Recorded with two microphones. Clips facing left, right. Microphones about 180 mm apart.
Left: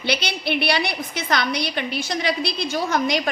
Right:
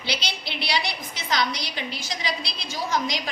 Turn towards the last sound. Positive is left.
turn(degrees=60)  # may be behind; listen again after turning